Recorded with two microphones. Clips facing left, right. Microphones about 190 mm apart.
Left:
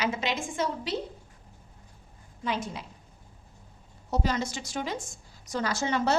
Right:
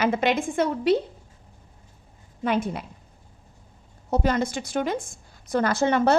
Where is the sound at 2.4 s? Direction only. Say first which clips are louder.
Right 7 dB; 55° right (ahead or behind).